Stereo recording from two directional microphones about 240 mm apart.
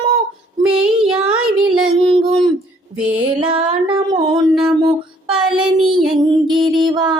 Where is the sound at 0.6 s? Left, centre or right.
Centre.